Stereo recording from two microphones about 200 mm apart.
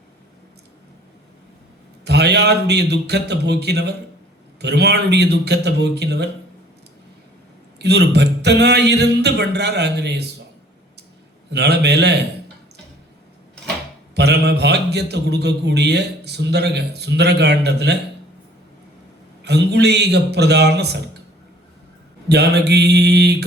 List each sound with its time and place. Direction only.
2.0 s speech: 55° right (ahead or behind)
7.8 s speech: 55° right (ahead or behind)
11.5 s speech: 55° right (ahead or behind)
14.2 s speech: 55° right (ahead or behind)
19.5 s speech: 55° right (ahead or behind)
22.3 s speech: 55° right (ahead or behind)